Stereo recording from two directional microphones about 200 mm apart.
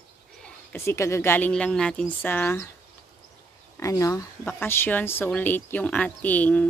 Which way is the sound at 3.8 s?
15° left (ahead or behind).